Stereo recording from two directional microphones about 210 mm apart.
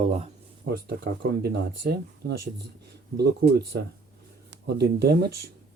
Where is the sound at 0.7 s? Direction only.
45° right (ahead or behind).